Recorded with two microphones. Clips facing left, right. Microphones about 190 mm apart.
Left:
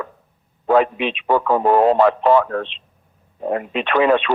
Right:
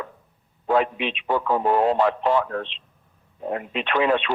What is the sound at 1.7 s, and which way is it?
Speech, 60° left (ahead or behind).